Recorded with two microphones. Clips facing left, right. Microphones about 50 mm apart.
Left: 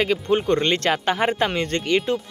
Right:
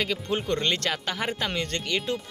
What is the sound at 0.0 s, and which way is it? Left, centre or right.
Speech, left.